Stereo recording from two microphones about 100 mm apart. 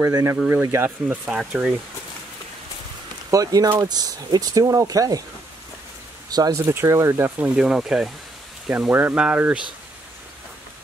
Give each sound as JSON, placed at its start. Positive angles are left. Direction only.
{"t": 0.0, "sound": "speech", "side_deg": -30}
{"t": 1.0, "sound": "speech", "side_deg": -10}
{"t": 3.3, "sound": "speech", "side_deg": -40}
{"t": 6.3, "sound": "speech", "side_deg": -40}
{"t": 6.7, "sound": "speech", "side_deg": -25}
{"t": 7.6, "sound": "speech", "side_deg": -5}
{"t": 8.6, "sound": "speech", "side_deg": -15}